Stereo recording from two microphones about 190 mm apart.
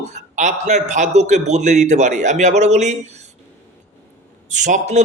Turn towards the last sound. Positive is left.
turn(degrees=-40)  # may be behind; listen again after turning